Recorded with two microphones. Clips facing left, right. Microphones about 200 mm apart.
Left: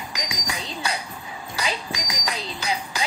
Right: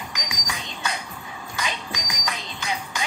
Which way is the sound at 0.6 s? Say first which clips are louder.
Left 2 dB; 35° left (ahead or behind).